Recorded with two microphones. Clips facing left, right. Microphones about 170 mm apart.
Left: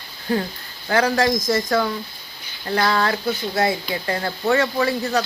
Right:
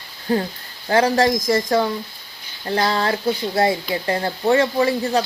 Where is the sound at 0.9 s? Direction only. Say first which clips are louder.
Right 2 dB; 30° right (ahead or behind).